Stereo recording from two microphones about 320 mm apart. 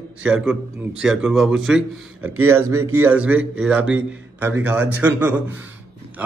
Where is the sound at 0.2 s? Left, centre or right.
Centre.